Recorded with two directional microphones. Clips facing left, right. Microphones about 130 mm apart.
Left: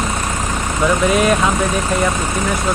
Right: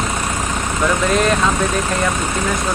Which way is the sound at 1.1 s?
5° left (ahead or behind).